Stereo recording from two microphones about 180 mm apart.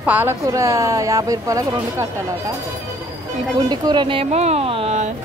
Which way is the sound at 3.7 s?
25° right (ahead or behind).